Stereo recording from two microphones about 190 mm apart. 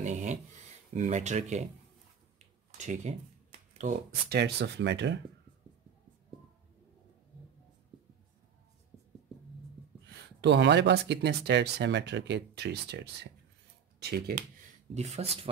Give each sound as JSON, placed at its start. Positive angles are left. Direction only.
{"t": 0.0, "sound": "a sound", "side_deg": -40}
{"t": 0.9, "sound": "speech", "side_deg": -40}
{"t": 2.3, "sound": "a sound", "side_deg": -40}
{"t": 3.7, "sound": "speech", "side_deg": -40}
{"t": 4.4, "sound": "speech", "side_deg": -65}
{"t": 10.0, "sound": "speech", "side_deg": -65}
{"t": 15.0, "sound": "speech", "side_deg": -35}